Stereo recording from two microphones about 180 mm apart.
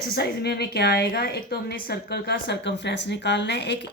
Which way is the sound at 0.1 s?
65° left (ahead or behind).